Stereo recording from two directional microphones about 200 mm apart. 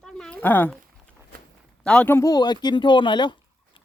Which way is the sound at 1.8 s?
5° left (ahead or behind).